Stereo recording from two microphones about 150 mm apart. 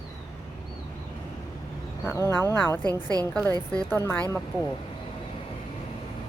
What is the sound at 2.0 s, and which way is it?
A woman's voice, 15° left (ahead or behind).